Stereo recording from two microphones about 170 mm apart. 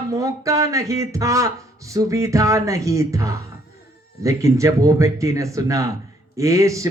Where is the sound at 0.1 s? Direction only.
20° right (ahead or behind).